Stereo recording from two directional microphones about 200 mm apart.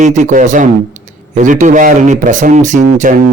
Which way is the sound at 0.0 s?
35° right (ahead or behind).